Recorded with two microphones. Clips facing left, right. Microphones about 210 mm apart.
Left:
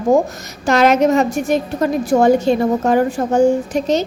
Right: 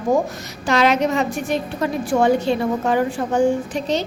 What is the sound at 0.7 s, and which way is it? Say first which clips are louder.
A woman's voice: left 5 dB; 45° left (ahead or behind).